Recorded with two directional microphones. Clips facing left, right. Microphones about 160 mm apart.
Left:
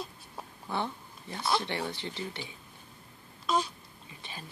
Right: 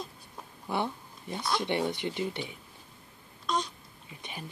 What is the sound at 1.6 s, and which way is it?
Speech, 15° right (ahead or behind).